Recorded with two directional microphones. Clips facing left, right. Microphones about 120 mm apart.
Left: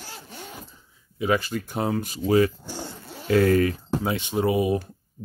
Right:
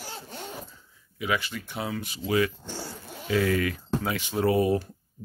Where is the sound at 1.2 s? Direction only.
40° left (ahead or behind).